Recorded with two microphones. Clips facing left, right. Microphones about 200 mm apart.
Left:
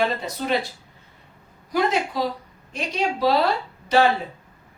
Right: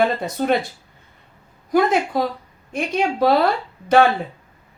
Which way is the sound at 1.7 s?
50° right (ahead or behind).